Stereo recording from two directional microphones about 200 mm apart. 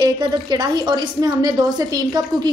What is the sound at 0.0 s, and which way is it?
A woman's voice, 20° right (ahead or behind).